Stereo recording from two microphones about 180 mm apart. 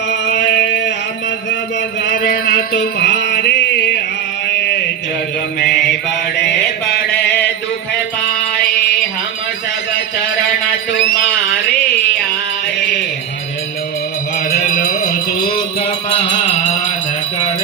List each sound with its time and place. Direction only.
0.1 s a sound: 75° left (ahead or behind)
2.0 s music: 65° left (ahead or behind)
4.5 s mantra: 70° left (ahead or behind)
14.6 s music: 45° left (ahead or behind)
16.0 s music: 30° left (ahead or behind)